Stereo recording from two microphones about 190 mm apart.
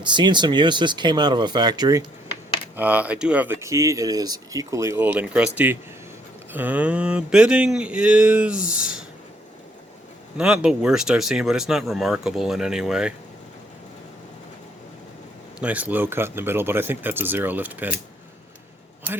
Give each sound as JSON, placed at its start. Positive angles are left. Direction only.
{"t": 0.0, "sound": "speech", "side_deg": -25}
{"t": 2.7, "sound": "speech", "side_deg": -10}
{"t": 10.3, "sound": "speech", "side_deg": -5}
{"t": 15.6, "sound": "speech", "side_deg": -10}